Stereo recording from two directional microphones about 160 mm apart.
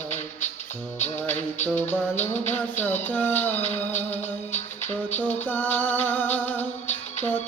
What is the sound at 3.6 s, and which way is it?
Music, 45° left (ahead or behind).